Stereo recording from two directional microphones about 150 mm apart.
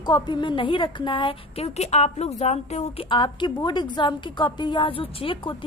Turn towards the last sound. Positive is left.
turn(degrees=35)  # may be behind; listen again after turning